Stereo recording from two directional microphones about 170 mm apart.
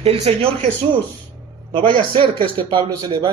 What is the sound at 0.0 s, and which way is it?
Speech, 35° right (ahead or behind).